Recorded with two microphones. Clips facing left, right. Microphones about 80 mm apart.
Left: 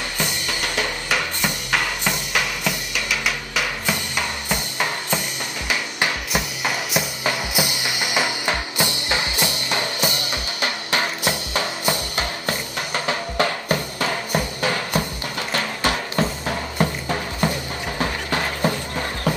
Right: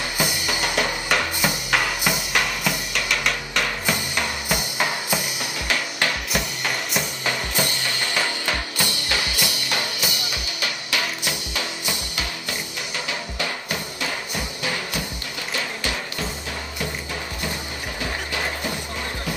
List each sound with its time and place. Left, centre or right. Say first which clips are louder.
0.2 s drum kit: right 2 dB; centre
6.3 s drum kit: left 2 dB; centre; by 15.0 s left
15.5 s music: left 5 dB; left